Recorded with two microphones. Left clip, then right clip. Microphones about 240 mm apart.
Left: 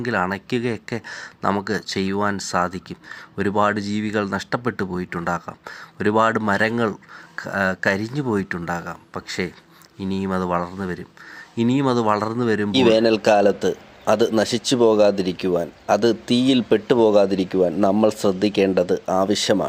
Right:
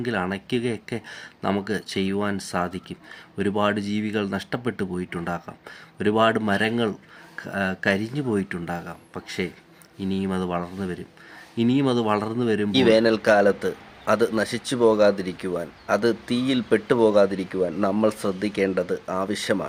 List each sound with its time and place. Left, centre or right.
0.0 s speech: centre